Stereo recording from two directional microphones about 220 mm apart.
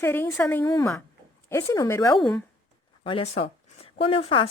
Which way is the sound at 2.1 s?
Centre (ahead or behind).